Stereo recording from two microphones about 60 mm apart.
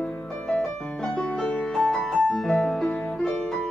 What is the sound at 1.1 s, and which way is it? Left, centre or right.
Music, centre.